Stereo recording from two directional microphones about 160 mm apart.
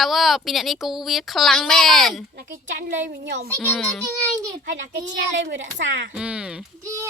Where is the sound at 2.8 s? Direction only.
90° right.